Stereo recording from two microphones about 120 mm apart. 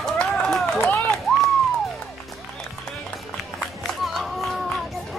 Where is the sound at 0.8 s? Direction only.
15° left (ahead or behind).